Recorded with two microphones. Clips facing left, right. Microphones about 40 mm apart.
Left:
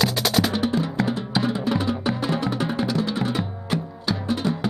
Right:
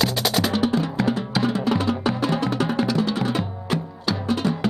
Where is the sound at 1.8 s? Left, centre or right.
Centre.